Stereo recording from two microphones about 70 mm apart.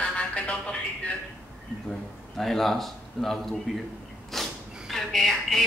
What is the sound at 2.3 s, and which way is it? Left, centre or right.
A man's voice, centre.